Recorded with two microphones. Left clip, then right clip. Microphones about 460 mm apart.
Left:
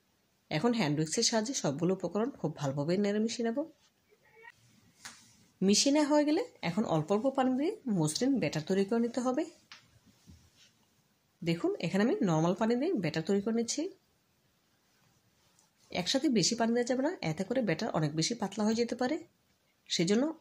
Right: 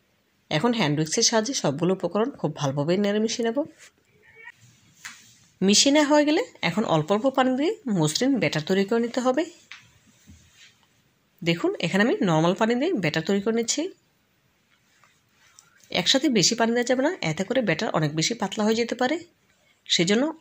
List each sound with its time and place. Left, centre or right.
0.5 s speech: right
5.6 s speech: right
11.4 s speech: right
15.9 s speech: right